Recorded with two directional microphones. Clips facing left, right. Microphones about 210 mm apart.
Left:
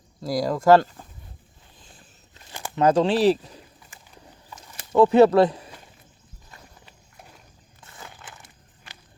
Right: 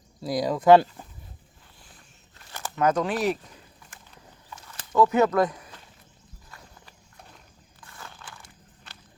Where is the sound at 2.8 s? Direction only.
30° left (ahead or behind).